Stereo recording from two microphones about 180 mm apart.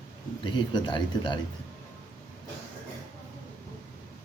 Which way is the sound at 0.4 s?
25° left (ahead or behind).